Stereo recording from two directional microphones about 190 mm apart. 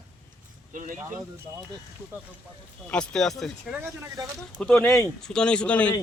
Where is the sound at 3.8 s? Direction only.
15° right (ahead or behind).